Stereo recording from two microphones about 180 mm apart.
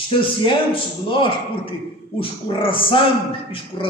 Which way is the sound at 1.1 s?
30° left (ahead or behind).